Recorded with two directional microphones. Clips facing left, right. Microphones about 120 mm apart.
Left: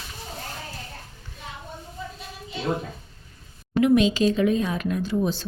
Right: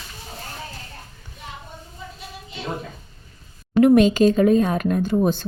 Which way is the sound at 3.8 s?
50° right (ahead or behind).